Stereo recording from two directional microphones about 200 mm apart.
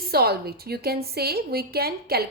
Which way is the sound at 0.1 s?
50° right (ahead or behind).